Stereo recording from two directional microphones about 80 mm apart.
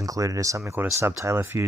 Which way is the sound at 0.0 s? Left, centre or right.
Right.